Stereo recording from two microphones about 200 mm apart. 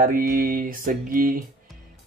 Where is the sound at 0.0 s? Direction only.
45° right (ahead or behind).